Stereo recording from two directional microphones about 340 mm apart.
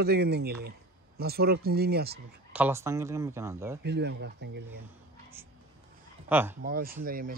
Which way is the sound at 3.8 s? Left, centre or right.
Right.